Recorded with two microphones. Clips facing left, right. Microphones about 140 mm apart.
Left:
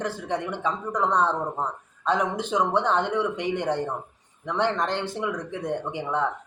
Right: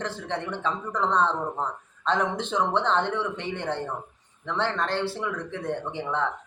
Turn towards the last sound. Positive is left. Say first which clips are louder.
# left 2 dB
turn(degrees=15)  # may be behind; listen again after turning